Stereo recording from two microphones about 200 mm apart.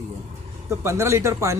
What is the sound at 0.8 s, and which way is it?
Speech, 15° right (ahead or behind).